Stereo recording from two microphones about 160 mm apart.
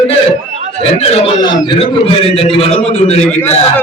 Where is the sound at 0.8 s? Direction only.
40° left (ahead or behind).